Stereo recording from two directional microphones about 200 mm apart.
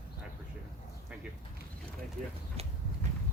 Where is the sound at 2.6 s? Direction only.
30° right (ahead or behind).